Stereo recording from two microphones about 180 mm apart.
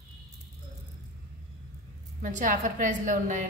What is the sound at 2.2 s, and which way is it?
A woman's voice, 45° right (ahead or behind).